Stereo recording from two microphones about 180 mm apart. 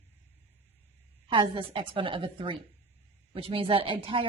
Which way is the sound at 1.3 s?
30° right (ahead or behind).